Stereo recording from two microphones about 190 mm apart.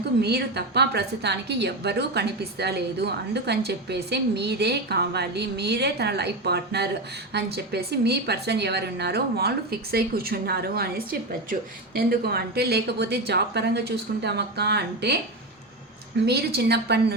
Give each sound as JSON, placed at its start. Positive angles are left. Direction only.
{"t": 0.2, "sound": "a woman's voice", "side_deg": -60}
{"t": 16.2, "sound": "a woman's voice", "side_deg": -60}